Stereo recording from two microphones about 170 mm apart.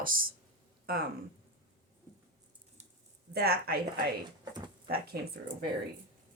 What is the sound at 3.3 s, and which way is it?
Speech, 70° right (ahead or behind).